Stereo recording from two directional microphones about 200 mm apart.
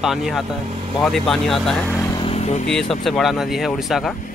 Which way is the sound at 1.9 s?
15° left (ahead or behind).